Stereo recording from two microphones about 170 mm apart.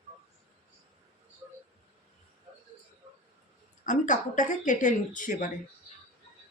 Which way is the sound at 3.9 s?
45° left (ahead or behind).